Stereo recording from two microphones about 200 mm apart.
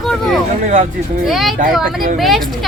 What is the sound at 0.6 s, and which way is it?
Speech, 40° right (ahead or behind).